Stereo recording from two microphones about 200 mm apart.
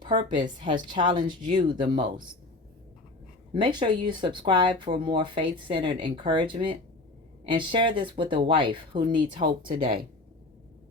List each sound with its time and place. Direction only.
0.0 s speech: 25° right (ahead or behind)
3.5 s speech: 25° right (ahead or behind)